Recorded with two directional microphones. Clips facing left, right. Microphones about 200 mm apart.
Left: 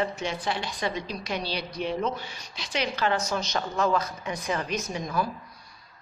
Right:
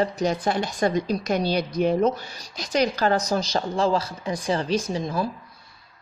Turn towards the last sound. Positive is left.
turn(degrees=-30)  # may be behind; listen again after turning